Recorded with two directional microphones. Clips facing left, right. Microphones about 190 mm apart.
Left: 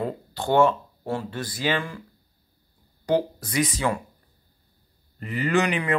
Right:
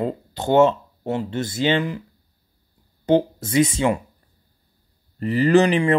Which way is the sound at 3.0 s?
25° right (ahead or behind).